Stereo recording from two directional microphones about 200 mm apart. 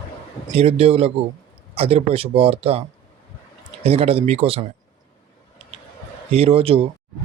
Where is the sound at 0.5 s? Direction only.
30° right (ahead or behind).